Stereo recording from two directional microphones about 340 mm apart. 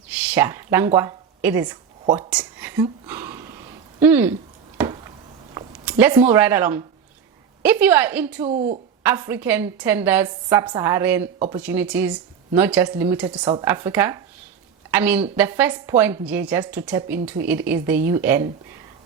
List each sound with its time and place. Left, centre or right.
0.1 s a sound: centre
4.0 s speech: centre
5.5 s a woman's voice: centre